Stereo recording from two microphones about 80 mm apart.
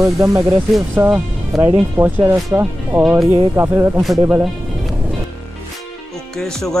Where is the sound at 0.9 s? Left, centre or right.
Right.